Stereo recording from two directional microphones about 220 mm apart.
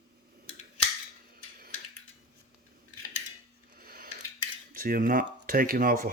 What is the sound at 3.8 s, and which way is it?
Scissors, 45° right (ahead or behind).